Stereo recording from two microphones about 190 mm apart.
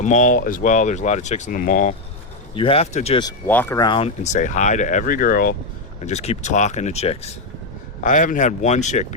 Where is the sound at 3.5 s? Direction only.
10° left (ahead or behind).